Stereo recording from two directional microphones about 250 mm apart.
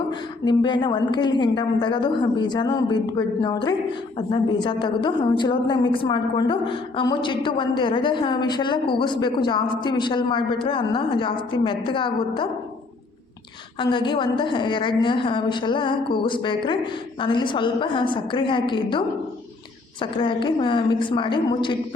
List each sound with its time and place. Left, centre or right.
0.1 s a woman's voice: centre
13.9 s a woman's voice: centre